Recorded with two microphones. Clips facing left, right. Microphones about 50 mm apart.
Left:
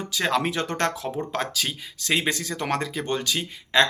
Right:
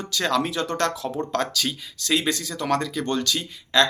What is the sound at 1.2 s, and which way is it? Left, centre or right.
Speech, centre.